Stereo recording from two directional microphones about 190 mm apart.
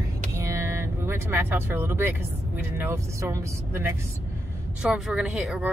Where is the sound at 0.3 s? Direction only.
15° right (ahead or behind).